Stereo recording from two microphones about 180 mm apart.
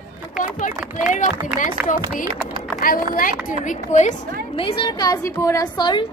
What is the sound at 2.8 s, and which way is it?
A woman's voice, 50° left (ahead or behind).